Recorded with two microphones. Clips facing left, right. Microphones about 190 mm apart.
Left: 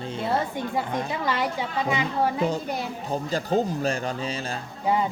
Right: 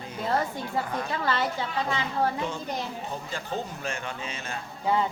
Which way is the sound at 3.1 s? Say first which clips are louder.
Left 8 dB; 40° left (ahead or behind).